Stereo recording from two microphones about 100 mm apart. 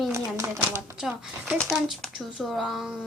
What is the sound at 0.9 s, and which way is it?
A woman's voice, 5° right (ahead or behind).